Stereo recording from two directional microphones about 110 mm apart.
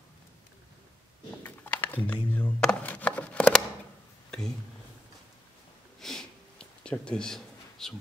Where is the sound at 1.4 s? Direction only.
15° left (ahead or behind).